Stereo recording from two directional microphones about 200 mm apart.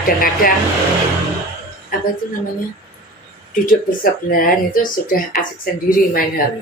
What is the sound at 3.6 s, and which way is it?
Speech, 45° left (ahead or behind).